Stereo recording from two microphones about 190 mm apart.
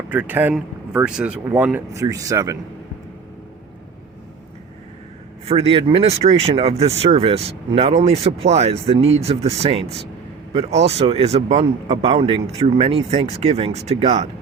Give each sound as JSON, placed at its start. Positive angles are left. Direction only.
{"t": 0.1, "sound": "speech", "side_deg": -10}
{"t": 5.5, "sound": "speech", "side_deg": -30}